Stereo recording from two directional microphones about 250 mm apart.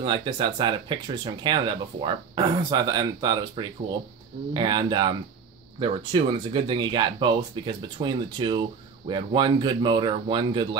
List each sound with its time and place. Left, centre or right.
0.0 s speech: centre